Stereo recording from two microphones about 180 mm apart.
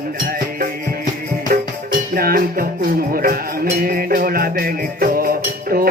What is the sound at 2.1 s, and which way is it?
Music, 55° right (ahead or behind).